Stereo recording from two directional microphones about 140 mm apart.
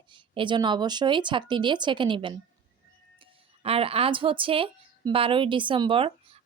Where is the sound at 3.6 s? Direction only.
45° right (ahead or behind).